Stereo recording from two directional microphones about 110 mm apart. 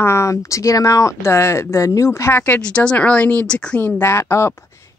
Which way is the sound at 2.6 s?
10° left (ahead or behind).